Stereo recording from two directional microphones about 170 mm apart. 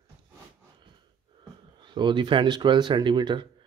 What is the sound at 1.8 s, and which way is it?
Speech, 25° right (ahead or behind).